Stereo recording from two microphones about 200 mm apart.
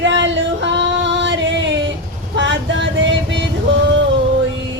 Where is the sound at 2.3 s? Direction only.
65° right (ahead or behind).